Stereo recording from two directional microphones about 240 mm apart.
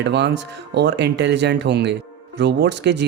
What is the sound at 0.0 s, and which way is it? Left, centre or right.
Speech, right.